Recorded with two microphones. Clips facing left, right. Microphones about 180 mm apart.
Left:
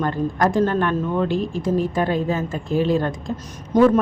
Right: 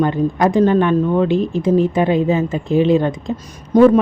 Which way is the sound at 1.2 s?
Centre (ahead or behind).